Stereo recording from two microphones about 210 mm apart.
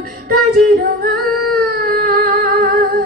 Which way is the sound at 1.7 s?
50° right (ahead or behind).